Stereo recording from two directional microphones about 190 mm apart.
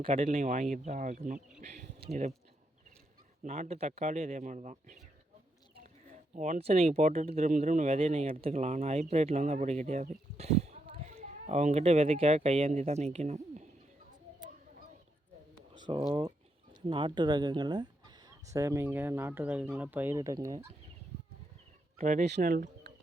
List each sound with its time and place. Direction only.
0.0 s speech: 40° right (ahead or behind)
3.4 s speech: 40° right (ahead or behind)
6.3 s speech: 40° right (ahead or behind)
10.8 s a sound: 45° right (ahead or behind)
11.1 s speech: 35° right (ahead or behind)
15.9 s speech: 25° right (ahead or behind)
21.9 s speech: 40° right (ahead or behind)